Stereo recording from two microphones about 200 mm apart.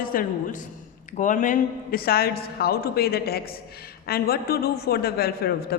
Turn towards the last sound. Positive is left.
turn(degrees=50)  # may be behind; listen again after turning